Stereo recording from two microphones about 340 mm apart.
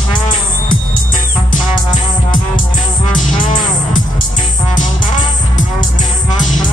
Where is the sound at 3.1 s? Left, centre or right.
Left.